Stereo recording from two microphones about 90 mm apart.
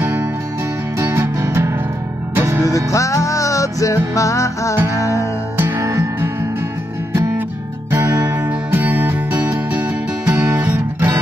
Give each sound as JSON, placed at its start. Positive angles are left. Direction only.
{"t": 0.0, "sound": "music", "side_deg": -25}
{"t": 2.9, "sound": "music", "side_deg": 35}
{"t": 4.7, "sound": "music", "side_deg": -35}
{"t": 7.9, "sound": "music", "side_deg": -25}